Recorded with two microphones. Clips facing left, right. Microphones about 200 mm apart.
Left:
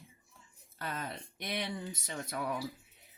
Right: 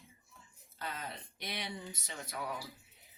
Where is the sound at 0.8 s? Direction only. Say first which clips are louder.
Left 3 dB; 50° left (ahead or behind).